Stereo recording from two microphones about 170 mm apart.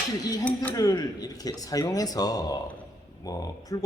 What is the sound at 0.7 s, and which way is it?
Speech, 20° left (ahead or behind).